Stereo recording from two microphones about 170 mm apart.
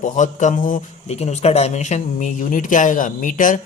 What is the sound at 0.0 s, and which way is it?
Speech, 45° left (ahead or behind).